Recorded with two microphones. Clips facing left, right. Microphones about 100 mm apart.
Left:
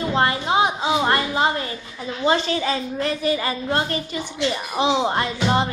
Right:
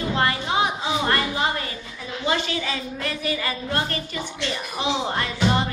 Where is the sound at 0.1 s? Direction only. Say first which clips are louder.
Left 4 dB; 25° left (ahead or behind).